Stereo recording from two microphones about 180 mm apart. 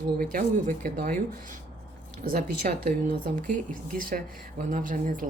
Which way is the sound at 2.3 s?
55° right (ahead or behind).